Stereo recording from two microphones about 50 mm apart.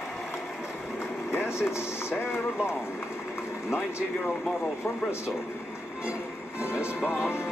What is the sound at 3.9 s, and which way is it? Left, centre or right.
Speech, left.